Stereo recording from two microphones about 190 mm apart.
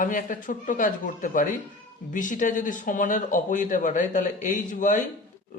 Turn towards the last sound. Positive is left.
turn(degrees=40)  # may be behind; listen again after turning